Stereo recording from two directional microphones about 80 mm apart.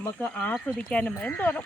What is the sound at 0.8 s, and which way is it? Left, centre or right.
Speech, centre.